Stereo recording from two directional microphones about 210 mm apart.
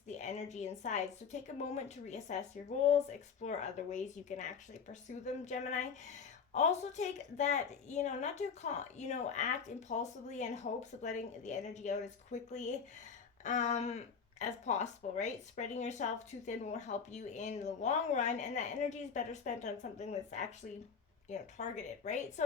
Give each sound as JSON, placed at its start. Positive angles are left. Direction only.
{"t": 0.1, "sound": "speech", "side_deg": 35}